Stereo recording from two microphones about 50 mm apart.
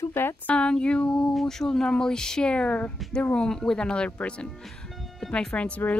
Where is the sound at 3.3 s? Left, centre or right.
Centre.